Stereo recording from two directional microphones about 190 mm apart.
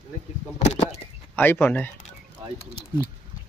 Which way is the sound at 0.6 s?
35° left (ahead or behind).